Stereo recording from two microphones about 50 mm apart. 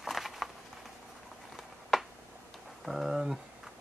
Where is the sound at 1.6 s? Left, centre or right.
Centre.